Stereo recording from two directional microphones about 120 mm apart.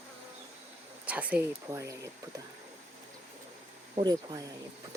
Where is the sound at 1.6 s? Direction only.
25° right (ahead or behind).